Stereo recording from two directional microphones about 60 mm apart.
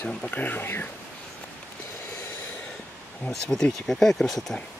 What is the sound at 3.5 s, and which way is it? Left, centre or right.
Speech, centre.